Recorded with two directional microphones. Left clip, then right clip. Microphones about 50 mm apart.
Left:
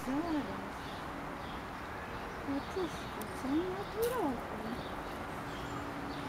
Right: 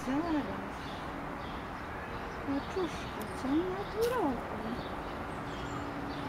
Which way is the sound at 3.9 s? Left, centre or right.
Centre.